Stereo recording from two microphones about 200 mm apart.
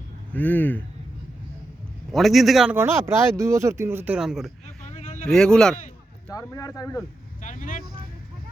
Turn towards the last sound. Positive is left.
turn(degrees=40)  # may be behind; listen again after turning